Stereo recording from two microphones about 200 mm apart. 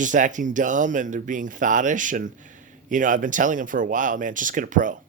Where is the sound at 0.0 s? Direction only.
40° right (ahead or behind).